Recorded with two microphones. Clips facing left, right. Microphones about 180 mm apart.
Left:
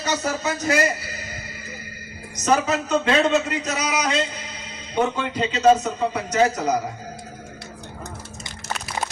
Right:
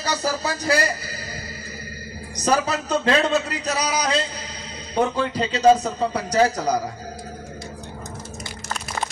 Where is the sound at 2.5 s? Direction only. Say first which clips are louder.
Left 1 dB; 35° right (ahead or behind).